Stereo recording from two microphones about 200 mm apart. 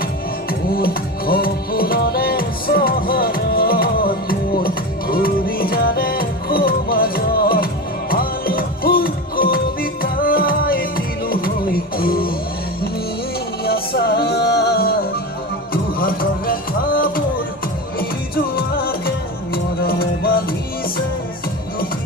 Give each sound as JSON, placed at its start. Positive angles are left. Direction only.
{"t": 0.5, "sound": "music", "side_deg": 50}
{"t": 13.7, "sound": "music", "side_deg": 50}
{"t": 18.3, "sound": "music", "side_deg": 50}